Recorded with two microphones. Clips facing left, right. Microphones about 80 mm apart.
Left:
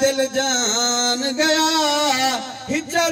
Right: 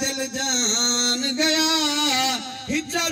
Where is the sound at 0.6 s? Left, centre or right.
Left.